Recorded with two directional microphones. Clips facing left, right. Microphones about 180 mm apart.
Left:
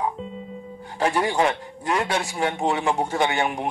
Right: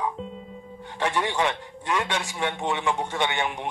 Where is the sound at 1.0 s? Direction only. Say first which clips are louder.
Left 4 dB; 35° left (ahead or behind).